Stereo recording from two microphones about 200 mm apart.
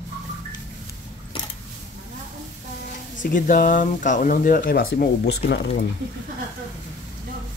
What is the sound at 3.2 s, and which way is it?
Speech, 40° left (ahead or behind).